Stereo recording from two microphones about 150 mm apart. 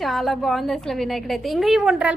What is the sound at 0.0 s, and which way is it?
A woman's voice, centre (ahead or behind).